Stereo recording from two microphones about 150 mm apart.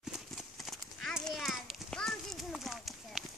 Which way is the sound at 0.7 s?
Centre (ahead or behind).